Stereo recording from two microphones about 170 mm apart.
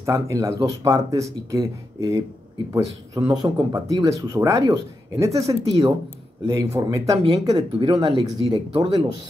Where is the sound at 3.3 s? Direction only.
25° right (ahead or behind).